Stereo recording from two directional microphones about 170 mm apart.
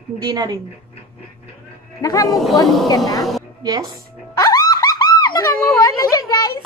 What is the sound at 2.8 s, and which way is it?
Speech, 20° left (ahead or behind).